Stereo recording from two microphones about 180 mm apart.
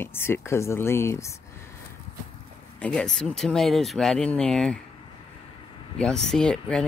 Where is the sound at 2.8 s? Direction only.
5° left (ahead or behind).